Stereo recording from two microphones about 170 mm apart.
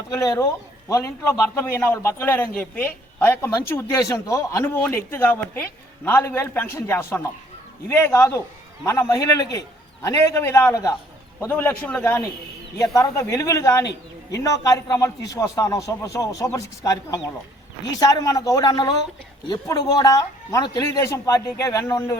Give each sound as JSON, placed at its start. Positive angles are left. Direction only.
{"t": 0.1, "sound": "a man's voice", "side_deg": 15}